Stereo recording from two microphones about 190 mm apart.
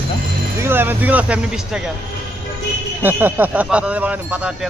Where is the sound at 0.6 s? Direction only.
10° right (ahead or behind).